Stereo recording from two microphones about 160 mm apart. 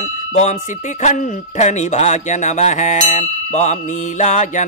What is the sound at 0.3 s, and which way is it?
Speech, 50° left (ahead or behind).